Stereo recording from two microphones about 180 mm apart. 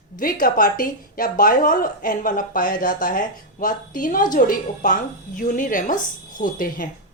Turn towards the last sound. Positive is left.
turn(degrees=50)  # may be behind; listen again after turning